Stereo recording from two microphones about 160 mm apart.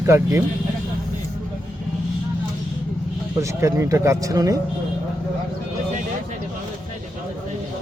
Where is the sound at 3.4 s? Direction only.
20° right (ahead or behind).